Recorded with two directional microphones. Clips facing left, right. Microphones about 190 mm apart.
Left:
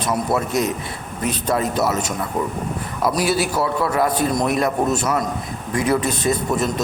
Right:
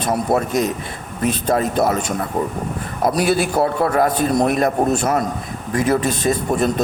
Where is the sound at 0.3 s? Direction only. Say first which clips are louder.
Right 2 dB; 50° right (ahead or behind).